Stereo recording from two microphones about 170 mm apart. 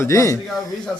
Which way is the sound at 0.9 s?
5° left (ahead or behind).